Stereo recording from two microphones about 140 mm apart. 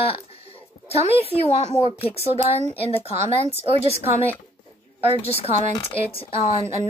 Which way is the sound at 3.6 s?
50° left (ahead or behind).